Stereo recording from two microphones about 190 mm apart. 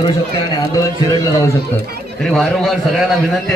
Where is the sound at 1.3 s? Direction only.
15° left (ahead or behind).